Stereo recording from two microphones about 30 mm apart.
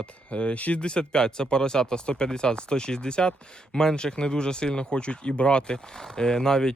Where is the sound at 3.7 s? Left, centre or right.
Centre.